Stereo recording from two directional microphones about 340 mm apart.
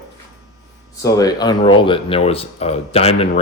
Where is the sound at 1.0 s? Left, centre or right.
Centre.